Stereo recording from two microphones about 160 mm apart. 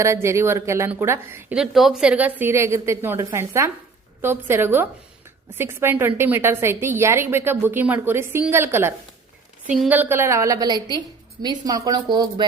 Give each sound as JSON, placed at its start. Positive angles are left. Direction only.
{"t": 0.0, "sound": "a woman's voice", "side_deg": -15}
{"t": 9.6, "sound": "a woman's voice", "side_deg": 0}
{"t": 9.9, "sound": "a woman's voice", "side_deg": -15}